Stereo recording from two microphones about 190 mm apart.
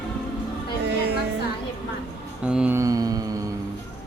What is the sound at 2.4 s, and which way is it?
Mantra, 5° right (ahead or behind).